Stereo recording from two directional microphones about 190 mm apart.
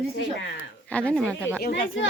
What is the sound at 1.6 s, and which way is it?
Speech, 75° left (ahead or behind).